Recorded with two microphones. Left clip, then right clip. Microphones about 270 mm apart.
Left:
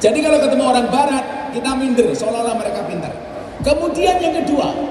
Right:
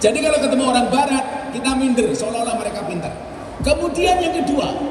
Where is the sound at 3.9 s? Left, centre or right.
Left.